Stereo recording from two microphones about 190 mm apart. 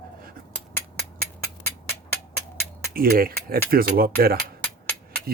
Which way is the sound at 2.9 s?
50° right (ahead or behind).